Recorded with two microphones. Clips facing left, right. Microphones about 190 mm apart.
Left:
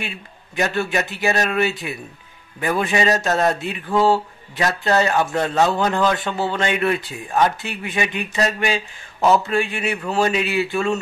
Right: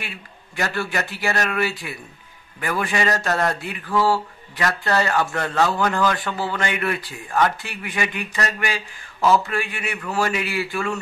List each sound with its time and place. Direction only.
0.0 s speech: 20° left (ahead or behind)